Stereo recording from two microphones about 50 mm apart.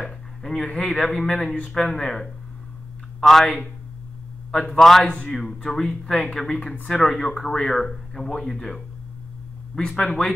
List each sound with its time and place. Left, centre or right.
0.0 s a sound: centre
1.2 s speech: centre
4.5 s speech: centre
5.0 s speech: left
5.3 s speech: centre
5.6 s speech: centre